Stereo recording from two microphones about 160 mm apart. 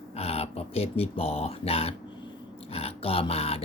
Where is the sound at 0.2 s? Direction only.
40° left (ahead or behind).